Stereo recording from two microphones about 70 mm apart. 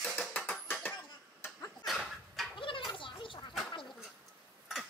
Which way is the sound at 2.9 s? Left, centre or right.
Left.